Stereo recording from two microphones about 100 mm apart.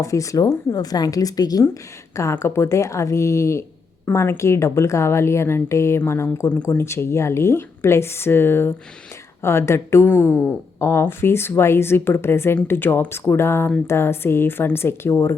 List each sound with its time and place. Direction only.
0.0 s a woman's voice: 30° left (ahead or behind)
2.3 s a woman's voice: 25° left (ahead or behind)